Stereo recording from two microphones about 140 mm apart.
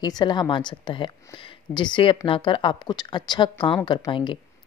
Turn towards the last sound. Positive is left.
turn(degrees=35)  # may be behind; listen again after turning